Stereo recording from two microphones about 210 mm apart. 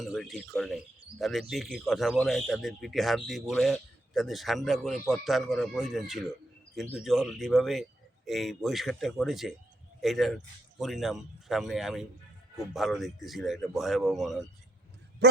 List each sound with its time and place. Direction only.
0.0 s a man's voice: centre (ahead or behind)
15.2 s speech: 50° right (ahead or behind)